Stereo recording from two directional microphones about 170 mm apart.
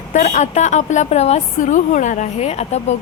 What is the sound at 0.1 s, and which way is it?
A woman's voice, 45° left (ahead or behind).